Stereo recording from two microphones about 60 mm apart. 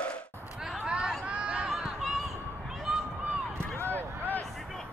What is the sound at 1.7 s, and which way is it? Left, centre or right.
Run, centre.